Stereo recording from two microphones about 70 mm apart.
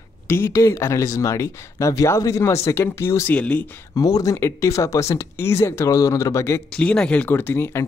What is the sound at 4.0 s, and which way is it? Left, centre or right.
Speech, left.